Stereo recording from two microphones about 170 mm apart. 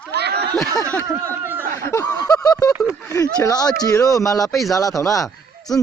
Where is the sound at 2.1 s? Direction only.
20° left (ahead or behind).